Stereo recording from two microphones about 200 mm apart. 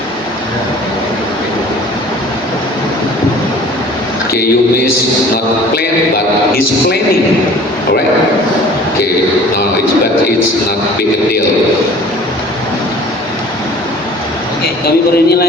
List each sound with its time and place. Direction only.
14.8 s a man's voice: 50° left (ahead or behind)